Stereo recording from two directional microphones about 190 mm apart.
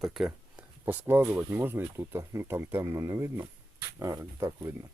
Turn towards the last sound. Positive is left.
turn(degrees=-15)  # may be behind; listen again after turning